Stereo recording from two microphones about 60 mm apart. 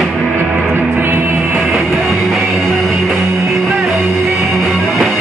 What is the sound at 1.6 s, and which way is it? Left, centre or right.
Music, centre.